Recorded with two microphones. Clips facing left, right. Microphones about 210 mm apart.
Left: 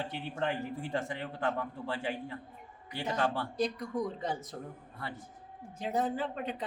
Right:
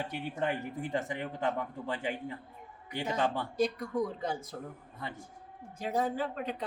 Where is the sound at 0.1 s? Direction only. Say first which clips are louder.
Right 1 dB; 15° right (ahead or behind).